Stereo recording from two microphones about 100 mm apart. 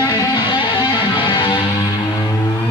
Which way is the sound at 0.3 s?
45° left (ahead or behind).